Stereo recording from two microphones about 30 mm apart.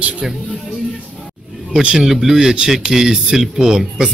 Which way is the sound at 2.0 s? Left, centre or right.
Centre.